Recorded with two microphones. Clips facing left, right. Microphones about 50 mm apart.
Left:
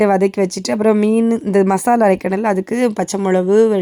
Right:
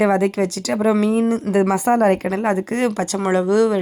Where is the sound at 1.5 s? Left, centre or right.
Centre.